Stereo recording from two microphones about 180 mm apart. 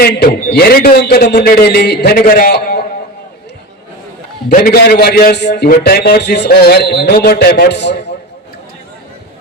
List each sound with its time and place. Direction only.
0.0 s a man's voice: 55° left (ahead or behind)
4.4 s a man's voice: 55° left (ahead or behind); by 8.1 s 70° left (ahead or behind)